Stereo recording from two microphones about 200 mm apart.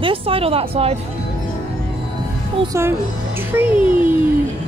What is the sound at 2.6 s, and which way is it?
A child's voice, 15° right (ahead or behind).